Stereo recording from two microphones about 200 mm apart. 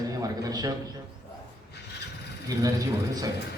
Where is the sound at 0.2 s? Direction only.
20° right (ahead or behind).